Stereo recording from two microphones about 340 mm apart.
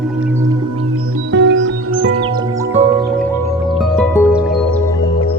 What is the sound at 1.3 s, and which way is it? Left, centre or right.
Music, right.